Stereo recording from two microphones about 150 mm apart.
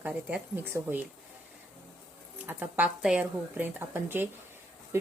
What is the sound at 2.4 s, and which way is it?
Speech, 10° right (ahead or behind).